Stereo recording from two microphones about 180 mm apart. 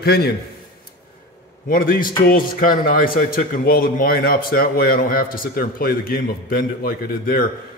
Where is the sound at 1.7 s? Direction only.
50° left (ahead or behind).